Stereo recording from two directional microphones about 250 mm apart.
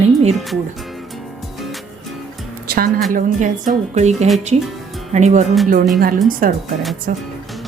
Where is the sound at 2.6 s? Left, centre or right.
Right.